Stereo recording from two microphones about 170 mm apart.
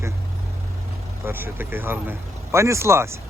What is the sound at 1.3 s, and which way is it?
Speech, 10° right (ahead or behind).